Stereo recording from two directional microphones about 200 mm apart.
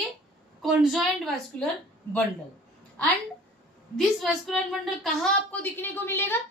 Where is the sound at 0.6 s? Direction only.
Centre (ahead or behind).